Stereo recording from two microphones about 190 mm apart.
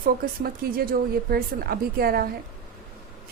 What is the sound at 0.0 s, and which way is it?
Speech, 50° right (ahead or behind).